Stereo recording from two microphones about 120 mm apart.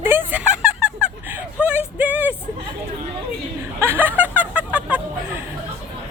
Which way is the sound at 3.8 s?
20° right (ahead or behind).